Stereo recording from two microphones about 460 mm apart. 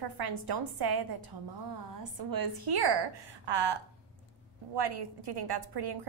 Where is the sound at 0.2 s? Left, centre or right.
Right.